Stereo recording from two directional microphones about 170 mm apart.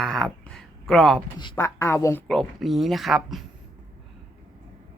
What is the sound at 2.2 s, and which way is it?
Speech, centre (ahead or behind).